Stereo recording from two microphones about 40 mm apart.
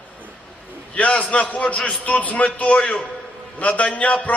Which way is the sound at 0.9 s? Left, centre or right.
Left.